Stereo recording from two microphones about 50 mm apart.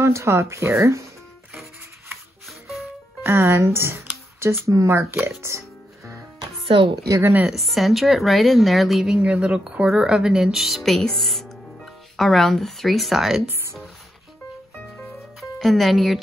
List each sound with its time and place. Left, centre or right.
0.0 s speech: right
3.3 s speech: right
3.5 s speech: right
4.4 s speech: right
7.1 s speech: right
7.4 s a woman's voice: centre
9.2 s speech: right; by 13.4 s centre
15.6 s a woman's voice: centre